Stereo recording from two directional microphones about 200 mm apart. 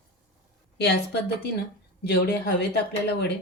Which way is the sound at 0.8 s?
55° left (ahead or behind).